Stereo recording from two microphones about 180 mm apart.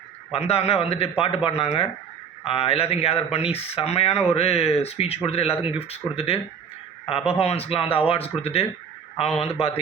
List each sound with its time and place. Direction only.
0.3 s speech: 35° left (ahead or behind)